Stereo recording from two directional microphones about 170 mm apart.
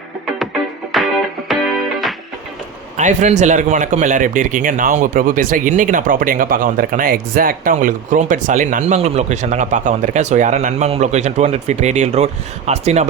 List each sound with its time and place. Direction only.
0.9 s music: centre (ahead or behind)
3.0 s a man's voice: 45° right (ahead or behind)